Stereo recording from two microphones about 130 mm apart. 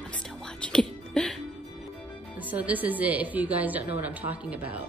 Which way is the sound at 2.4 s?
10° right (ahead or behind).